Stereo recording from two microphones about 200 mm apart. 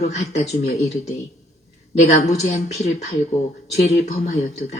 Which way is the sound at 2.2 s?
35° left (ahead or behind).